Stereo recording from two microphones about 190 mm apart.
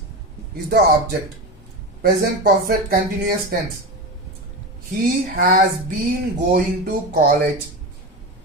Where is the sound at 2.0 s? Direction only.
50° right (ahead or behind).